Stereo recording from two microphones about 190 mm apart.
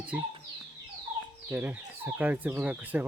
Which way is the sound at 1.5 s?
10° right (ahead or behind).